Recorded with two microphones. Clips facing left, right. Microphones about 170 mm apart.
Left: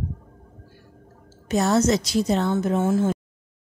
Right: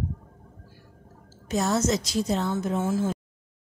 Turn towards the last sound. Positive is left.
turn(degrees=65)  # may be behind; listen again after turning